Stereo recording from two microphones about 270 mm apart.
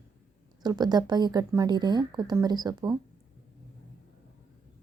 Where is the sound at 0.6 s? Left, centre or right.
Centre.